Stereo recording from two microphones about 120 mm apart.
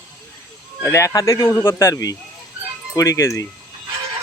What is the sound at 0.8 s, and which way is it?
Speech, 20° left (ahead or behind).